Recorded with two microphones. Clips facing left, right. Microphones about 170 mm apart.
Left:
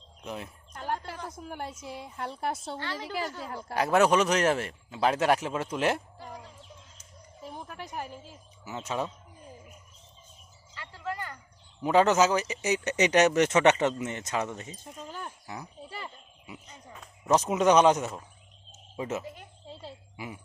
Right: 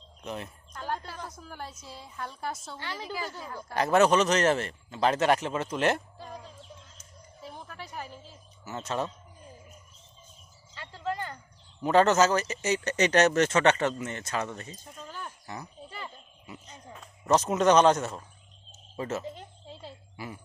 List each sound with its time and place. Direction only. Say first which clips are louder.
0.3 s speech: right 1 dB; 5° left (ahead or behind)
0.7 s a sound: left 1 dB; 25° left (ahead or behind)
1.4 s a woman's voice: left 4 dB; 20° left (ahead or behind)
3.8 s speech: right 1 dB; 10° left (ahead or behind)
8.1 s a woman's voice: left 2 dB; 15° left (ahead or behind)
10.8 s a sound: right 3 dB; 20° right (ahead or behind)
11.8 s speech: even; 5° left (ahead or behind)
14.6 s a sound: left 2 dB; 15° left (ahead or behind)
17.2 s speech: even; 10° left (ahead or behind)
19.2 s speech: right 3 dB; 25° right (ahead or behind)
19.6 s a sound: left 2 dB; centre (ahead or behind)
20.1 s speech: right 1 dB; 15° left (ahead or behind)